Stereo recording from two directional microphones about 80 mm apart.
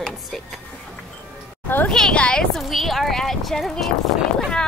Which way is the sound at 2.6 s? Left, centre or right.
Centre.